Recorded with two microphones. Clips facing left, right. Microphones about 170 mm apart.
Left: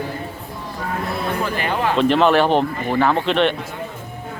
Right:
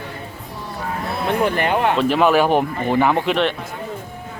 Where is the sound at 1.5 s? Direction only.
60° right (ahead or behind).